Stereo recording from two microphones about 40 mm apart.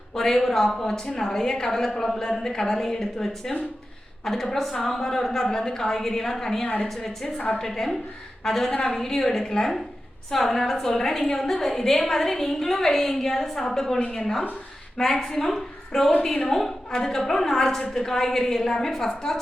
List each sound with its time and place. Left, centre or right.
0.2 s a woman's voice: centre
7.3 s speech: left
7.6 s a woman's voice: centre
14.0 s a woman's voice: centre